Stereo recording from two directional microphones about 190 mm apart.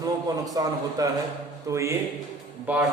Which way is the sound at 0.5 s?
20° right (ahead or behind).